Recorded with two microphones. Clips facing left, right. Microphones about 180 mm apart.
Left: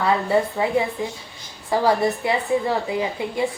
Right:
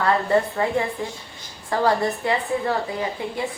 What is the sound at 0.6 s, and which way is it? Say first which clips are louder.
Speech: left 2 dB; 10° left (ahead or behind).